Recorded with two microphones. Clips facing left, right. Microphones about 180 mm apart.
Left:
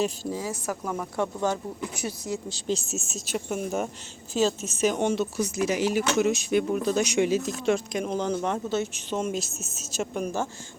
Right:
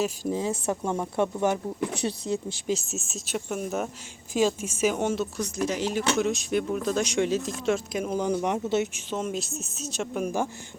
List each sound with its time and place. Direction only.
0.3 s speech: 20° right (ahead or behind)
2.0 s speech: 30° right (ahead or behind)
2.6 s speech: centre (ahead or behind)
4.4 s speech: 10° right (ahead or behind)
9.0 s speech: centre (ahead or behind)